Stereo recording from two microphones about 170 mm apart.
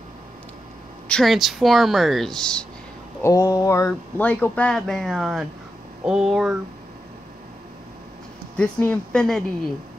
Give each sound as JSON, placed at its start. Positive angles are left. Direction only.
{"t": 1.0, "sound": "speech", "side_deg": 5}
{"t": 3.2, "sound": "a sound", "side_deg": 20}
{"t": 4.2, "sound": "speech", "side_deg": 10}
{"t": 8.5, "sound": "speech", "side_deg": 10}